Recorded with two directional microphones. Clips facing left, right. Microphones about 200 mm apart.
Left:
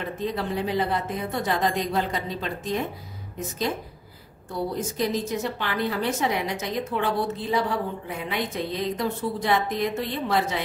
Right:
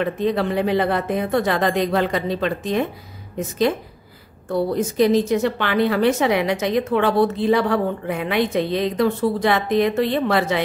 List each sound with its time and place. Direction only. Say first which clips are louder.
0.0 s a woman's voice: right 8 dB; 75° right (ahead or behind)